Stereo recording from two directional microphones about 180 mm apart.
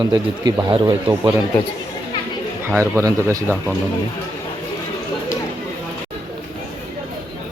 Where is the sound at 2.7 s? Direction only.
15° right (ahead or behind).